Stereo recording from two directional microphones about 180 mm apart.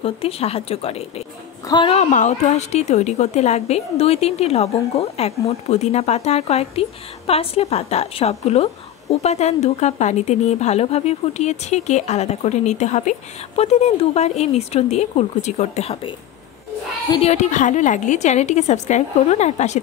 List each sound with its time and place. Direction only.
0.0 s a woman's voice: 35° left (ahead or behind)
17.2 s a woman's voice: 40° left (ahead or behind)